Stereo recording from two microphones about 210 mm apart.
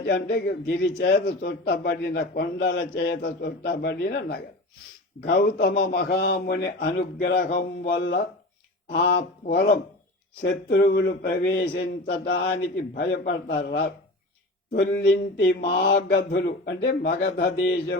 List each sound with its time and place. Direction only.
0.0 s a man's voice: 50° left (ahead or behind)
8.9 s a man's voice: 55° left (ahead or behind)